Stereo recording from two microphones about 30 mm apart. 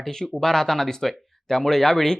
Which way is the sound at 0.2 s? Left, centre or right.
Centre.